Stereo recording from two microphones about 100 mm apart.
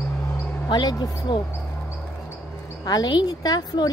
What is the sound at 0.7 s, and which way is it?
Speech, 45° left (ahead or behind).